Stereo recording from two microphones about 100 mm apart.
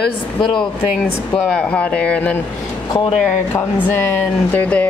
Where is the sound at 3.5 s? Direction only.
20° left (ahead or behind).